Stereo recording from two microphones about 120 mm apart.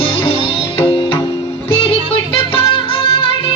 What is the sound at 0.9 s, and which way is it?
Music, 45° left (ahead or behind).